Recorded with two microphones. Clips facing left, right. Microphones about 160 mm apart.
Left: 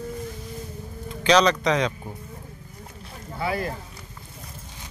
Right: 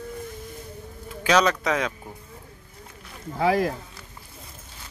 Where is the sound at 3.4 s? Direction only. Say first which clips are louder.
Right 6 dB; 90° right.